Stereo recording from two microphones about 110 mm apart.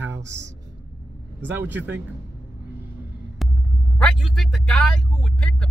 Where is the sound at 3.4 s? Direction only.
Centre (ahead or behind).